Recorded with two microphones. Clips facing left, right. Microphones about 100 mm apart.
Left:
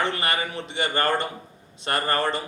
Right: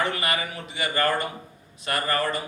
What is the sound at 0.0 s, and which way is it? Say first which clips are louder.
A man's voice: left 1 dB; 30° left (ahead or behind).